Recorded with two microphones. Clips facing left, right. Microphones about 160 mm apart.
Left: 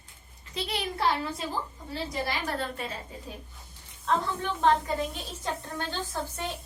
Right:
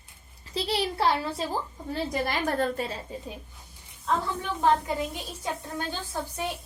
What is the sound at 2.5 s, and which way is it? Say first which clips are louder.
Speech: right 6 dB; 40° right (ahead or behind).